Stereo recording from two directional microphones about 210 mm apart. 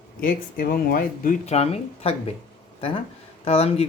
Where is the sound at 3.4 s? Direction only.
30° left (ahead or behind).